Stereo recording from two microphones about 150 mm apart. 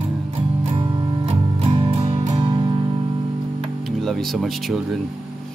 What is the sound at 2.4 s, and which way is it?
Music, 35° right (ahead or behind).